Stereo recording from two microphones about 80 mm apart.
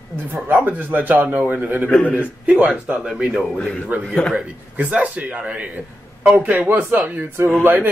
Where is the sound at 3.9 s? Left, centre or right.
Right.